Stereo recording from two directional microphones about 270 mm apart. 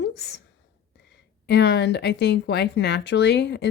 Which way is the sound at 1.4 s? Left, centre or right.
Left.